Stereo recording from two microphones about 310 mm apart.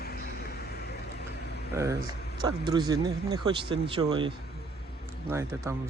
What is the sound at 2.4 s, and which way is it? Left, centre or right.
Speech, centre.